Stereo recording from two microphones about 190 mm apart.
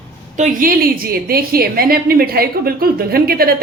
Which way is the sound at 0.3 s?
40° right (ahead or behind).